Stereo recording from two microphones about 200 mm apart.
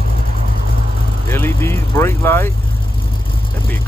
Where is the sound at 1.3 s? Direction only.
10° left (ahead or behind).